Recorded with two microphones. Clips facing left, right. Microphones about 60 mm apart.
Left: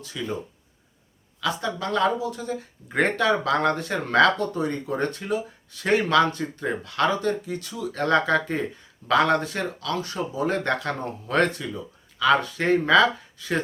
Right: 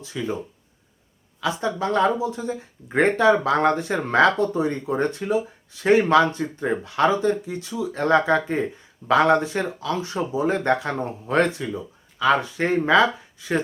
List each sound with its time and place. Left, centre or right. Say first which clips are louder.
0.0 s speech: right 3 dB; right
1.4 s speech: right 3 dB; right